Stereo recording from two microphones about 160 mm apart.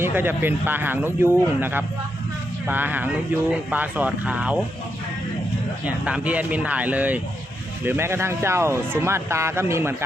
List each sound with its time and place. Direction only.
0.0 s speech: 15° right (ahead or behind)
5.8 s speech: 10° right (ahead or behind)